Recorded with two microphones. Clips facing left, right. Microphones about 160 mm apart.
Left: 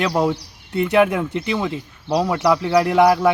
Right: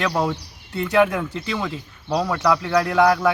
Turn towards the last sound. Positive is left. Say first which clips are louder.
# left 3 dB
turn(degrees=20)  # may be behind; listen again after turning